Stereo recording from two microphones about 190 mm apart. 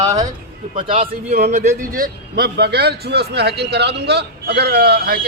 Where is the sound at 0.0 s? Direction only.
15° right (ahead or behind).